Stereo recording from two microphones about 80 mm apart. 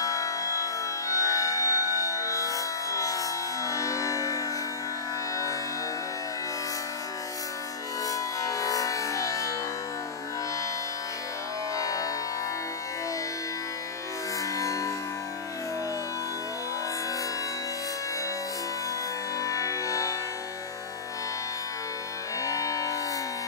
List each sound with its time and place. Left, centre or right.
0.0 s music: left
8.1 s music: left
11.7 s music: left
14.6 s music: left
19.4 s music: left
22.4 s music: left